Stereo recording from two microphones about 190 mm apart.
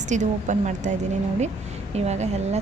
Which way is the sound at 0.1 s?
40° right (ahead or behind).